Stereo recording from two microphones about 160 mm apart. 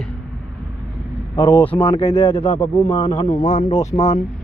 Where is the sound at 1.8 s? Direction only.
35° left (ahead or behind).